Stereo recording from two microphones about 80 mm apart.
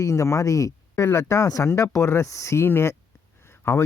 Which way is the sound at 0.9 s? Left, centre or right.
Left.